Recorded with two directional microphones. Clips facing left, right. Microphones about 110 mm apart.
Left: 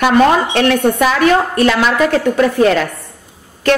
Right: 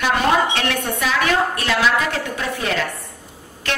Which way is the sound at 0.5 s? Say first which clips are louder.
Left 10 dB; 50° left (ahead or behind).